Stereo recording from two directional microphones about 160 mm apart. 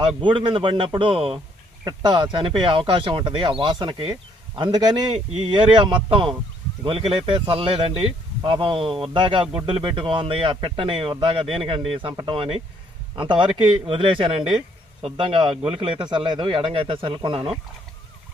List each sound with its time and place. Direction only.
0.2 s speech: 30° right (ahead or behind)